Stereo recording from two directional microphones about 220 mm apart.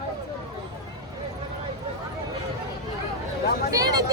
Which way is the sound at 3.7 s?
15° right (ahead or behind).